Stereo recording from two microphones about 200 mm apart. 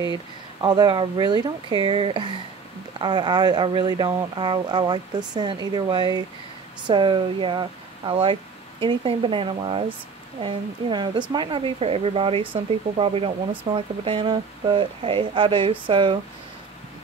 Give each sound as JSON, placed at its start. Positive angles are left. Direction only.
{"t": 0.6, "sound": "speech", "side_deg": -20}